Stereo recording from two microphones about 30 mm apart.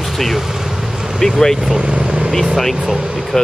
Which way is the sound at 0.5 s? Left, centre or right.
Centre.